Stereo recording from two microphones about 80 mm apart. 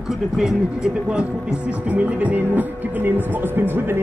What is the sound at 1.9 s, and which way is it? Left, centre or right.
Speech, centre.